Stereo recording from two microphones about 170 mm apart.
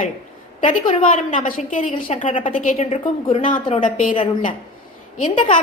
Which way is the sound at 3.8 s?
50° left (ahead or behind).